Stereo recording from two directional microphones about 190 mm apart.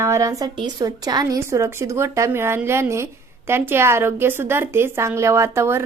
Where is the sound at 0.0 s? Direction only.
15° right (ahead or behind).